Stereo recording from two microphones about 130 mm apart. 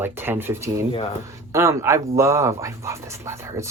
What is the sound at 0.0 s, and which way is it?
Speech, 15° right (ahead or behind).